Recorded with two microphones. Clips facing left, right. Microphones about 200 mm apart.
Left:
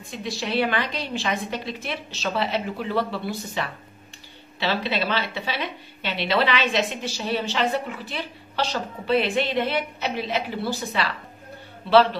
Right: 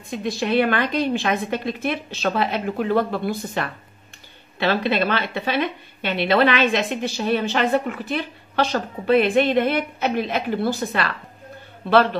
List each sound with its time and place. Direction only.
0.1 s a woman's voice: 55° right (ahead or behind)